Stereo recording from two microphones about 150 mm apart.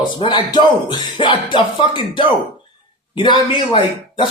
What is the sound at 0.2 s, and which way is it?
Speech, 30° left (ahead or behind).